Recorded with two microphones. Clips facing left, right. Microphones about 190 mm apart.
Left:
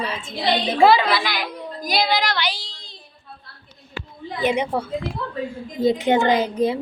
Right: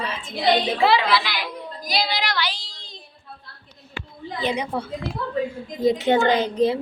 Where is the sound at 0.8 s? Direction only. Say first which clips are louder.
Left 4 dB; 45° left (ahead or behind).